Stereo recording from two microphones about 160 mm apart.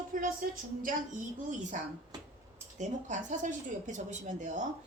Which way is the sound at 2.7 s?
50° right (ahead or behind).